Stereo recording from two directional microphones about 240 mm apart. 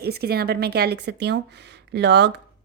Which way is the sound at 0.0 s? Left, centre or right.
Right.